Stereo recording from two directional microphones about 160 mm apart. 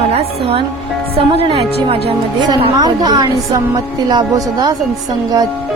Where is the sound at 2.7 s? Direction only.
25° right (ahead or behind).